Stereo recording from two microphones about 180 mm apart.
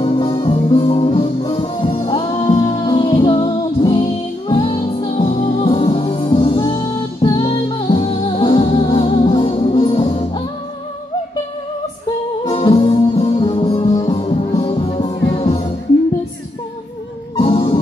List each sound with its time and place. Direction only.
0.0 s music: 25° left (ahead or behind)
12.4 s music: 25° left (ahead or behind)
17.5 s music: 30° left (ahead or behind)